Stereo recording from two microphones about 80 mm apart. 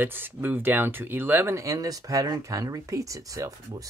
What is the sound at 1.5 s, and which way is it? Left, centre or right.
Speech, right.